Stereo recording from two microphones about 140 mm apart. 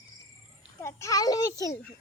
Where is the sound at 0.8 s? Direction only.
20° left (ahead or behind).